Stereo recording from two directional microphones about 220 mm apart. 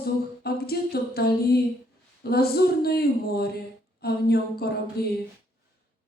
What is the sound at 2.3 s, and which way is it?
A woman's voice, 45° left (ahead or behind).